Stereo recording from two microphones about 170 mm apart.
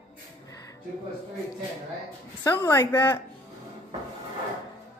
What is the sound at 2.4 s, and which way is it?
Speech, 15° left (ahead or behind).